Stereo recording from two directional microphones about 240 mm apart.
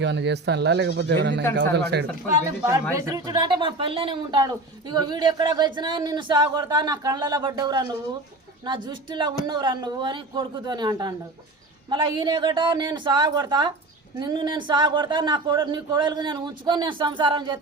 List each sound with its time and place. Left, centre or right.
0.0 s speech: right
2.9 s speech: centre